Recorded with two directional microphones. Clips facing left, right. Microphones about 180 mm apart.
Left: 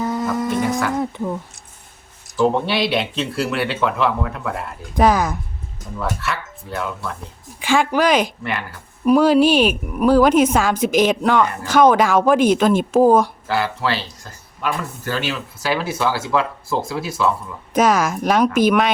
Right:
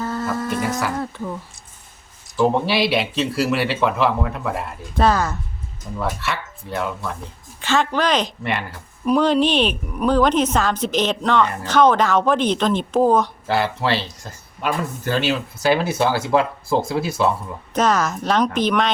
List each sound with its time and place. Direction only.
0.0 s a sound: 15° left (ahead or behind)
0.5 s a sound: centre (ahead or behind)
0.9 s speech: 20° left (ahead or behind)
2.3 s speech: centre (ahead or behind)
4.9 s a woman's voice: 10° left (ahead or behind)
6.0 s speech: centre (ahead or behind)
7.6 s a woman's voice: 10° left (ahead or behind)
13.5 s speech: 25° right (ahead or behind)
16.4 s speech: 30° right (ahead or behind)
17.7 s a woman's voice: 10° left (ahead or behind)